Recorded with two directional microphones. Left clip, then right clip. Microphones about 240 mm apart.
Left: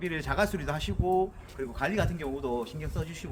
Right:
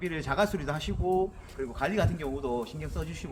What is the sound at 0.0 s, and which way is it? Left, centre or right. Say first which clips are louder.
Speech: right 1 dB; centre.